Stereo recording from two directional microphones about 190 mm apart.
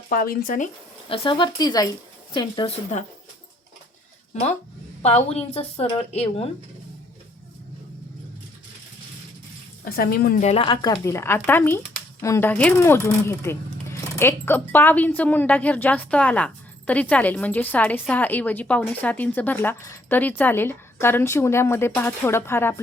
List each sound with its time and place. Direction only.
0.1 s speech: 50° left (ahead or behind)
1.0 s speech: 30° left (ahead or behind)
5.0 s a woman's voice: 35° left (ahead or behind)
9.8 s speech: 50° left (ahead or behind)
10.4 s speech: 30° left (ahead or behind); by 22.7 s 15° left (ahead or behind)